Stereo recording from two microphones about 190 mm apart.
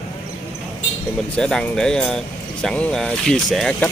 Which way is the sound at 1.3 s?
5° left (ahead or behind).